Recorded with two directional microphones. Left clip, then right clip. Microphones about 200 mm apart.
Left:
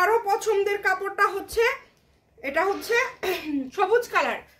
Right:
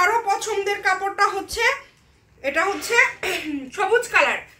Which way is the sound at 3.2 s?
40° left (ahead or behind).